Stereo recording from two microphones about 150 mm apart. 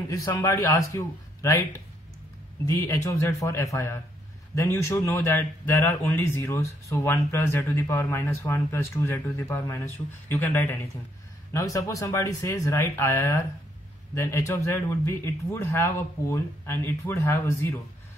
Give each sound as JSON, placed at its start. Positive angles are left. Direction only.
{"t": 0.3, "sound": "speech", "side_deg": 20}
{"t": 2.6, "sound": "a man's voice", "side_deg": 20}